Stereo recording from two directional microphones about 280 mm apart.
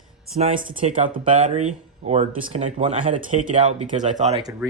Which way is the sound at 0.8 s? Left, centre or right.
Right.